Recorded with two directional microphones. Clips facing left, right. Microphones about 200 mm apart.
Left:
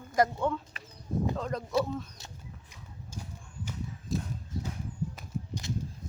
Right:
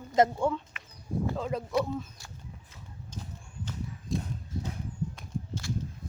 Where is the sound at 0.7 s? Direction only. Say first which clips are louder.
Left 2 dB; 35° left (ahead or behind).